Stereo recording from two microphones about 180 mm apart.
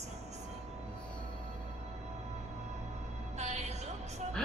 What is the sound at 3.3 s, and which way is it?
Music, 40° right (ahead or behind).